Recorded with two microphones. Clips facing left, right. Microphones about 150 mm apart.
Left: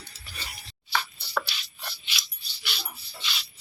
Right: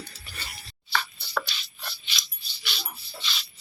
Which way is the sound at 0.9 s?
10° left (ahead or behind).